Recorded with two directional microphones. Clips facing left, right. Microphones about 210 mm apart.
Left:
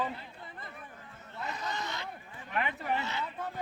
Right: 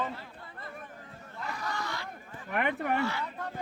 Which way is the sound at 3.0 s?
20° left (ahead or behind).